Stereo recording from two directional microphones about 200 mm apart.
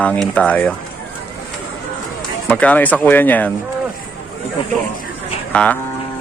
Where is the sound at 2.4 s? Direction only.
5° left (ahead or behind).